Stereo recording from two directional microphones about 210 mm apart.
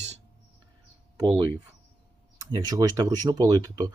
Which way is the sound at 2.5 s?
20° right (ahead or behind).